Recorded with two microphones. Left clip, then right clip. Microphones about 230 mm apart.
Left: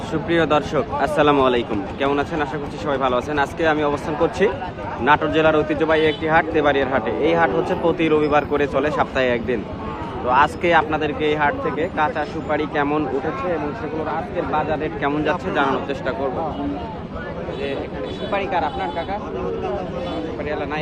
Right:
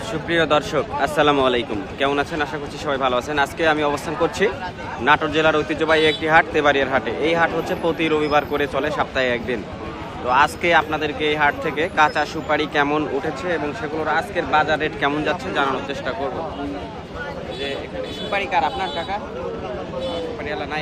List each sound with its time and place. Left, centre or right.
0.3 s a man's voice: centre
14.5 s speech: right
15.3 s a man's voice: centre
18.3 s a man's voice: centre